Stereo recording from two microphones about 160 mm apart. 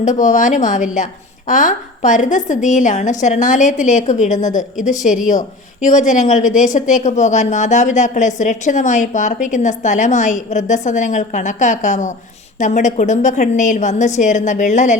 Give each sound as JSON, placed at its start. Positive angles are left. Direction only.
{"t": 0.0, "sound": "a woman's voice", "side_deg": 50}